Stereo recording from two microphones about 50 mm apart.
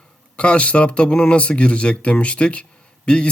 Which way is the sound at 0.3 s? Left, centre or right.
Left.